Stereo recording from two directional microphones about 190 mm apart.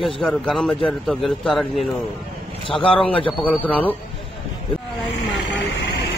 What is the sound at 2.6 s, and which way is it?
Speech, 25° left (ahead or behind).